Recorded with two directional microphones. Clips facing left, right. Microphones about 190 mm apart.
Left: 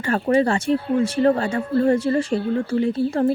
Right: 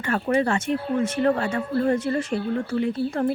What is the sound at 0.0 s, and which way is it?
Speech, 30° left (ahead or behind).